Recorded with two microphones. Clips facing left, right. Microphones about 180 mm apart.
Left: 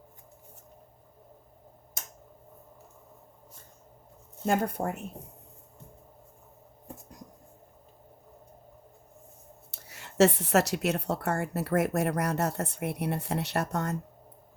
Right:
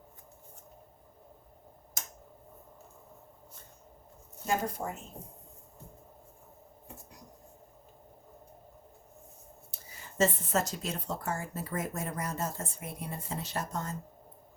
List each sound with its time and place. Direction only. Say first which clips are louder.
4.4 s speech: left 5 dB; 60° left (ahead or behind)
9.7 s speech: left 7 dB; 75° left (ahead or behind)